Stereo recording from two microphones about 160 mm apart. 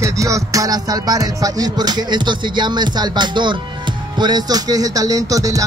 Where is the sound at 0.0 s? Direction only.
20° right (ahead or behind).